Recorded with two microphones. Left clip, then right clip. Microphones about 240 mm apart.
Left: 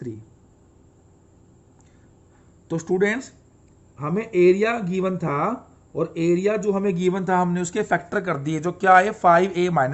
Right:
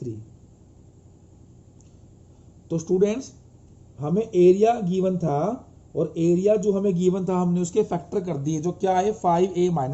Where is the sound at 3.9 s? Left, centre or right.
Left.